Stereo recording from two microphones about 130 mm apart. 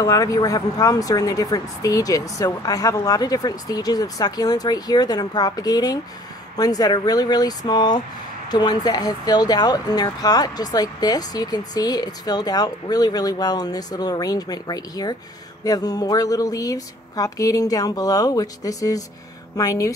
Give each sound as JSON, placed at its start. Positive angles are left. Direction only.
{"t": 0.0, "sound": "speech", "side_deg": 25}